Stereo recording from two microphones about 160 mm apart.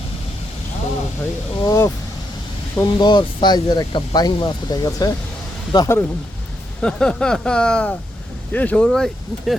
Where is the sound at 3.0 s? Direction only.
30° left (ahead or behind).